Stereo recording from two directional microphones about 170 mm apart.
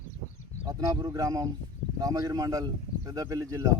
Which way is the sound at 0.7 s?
20° right (ahead or behind).